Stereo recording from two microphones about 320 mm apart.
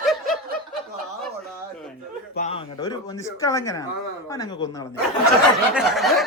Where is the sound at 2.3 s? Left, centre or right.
Centre.